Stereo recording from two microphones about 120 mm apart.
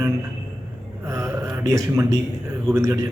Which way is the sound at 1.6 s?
25° right (ahead or behind).